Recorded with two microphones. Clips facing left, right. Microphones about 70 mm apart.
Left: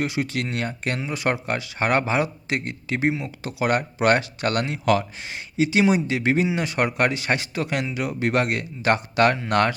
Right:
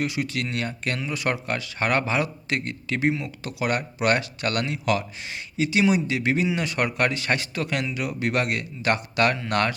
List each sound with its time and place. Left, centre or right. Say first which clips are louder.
0.0 s speech: left 2 dB; left